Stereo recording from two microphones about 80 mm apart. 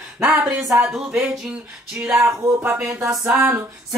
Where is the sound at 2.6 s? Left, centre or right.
Right.